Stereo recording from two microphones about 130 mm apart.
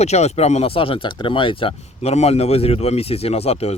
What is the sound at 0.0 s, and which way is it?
Speech, 55° left (ahead or behind).